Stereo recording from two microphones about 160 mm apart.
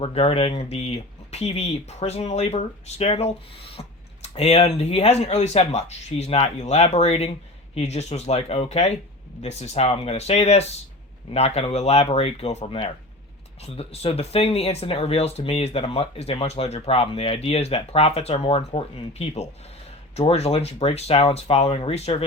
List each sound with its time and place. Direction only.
0.0 s speech: 40° left (ahead or behind)